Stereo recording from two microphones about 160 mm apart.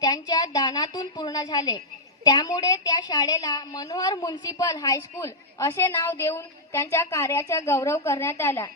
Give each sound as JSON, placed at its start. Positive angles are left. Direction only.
{"t": 0.0, "sound": "a woman's voice", "side_deg": 25}